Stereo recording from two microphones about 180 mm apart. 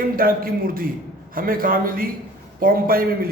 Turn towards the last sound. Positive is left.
turn(degrees=-55)  # may be behind; listen again after turning